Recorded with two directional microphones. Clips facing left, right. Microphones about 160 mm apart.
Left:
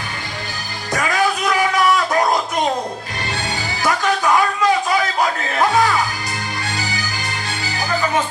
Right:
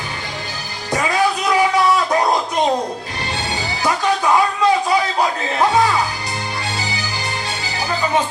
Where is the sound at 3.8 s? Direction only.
20° right (ahead or behind).